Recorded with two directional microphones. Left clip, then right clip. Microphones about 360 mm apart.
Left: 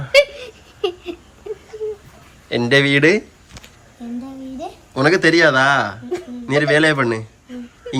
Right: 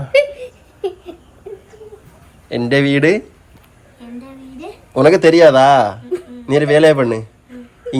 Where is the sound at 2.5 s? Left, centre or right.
Centre.